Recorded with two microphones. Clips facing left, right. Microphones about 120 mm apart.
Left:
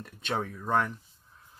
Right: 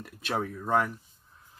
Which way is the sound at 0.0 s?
5° right (ahead or behind).